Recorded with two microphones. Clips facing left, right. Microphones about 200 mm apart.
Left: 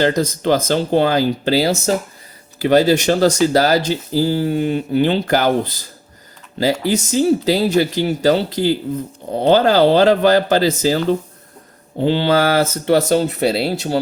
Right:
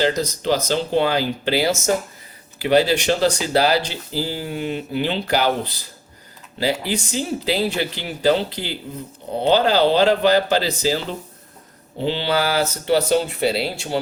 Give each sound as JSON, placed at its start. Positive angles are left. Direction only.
{"t": 0.0, "sound": "speech", "side_deg": 50}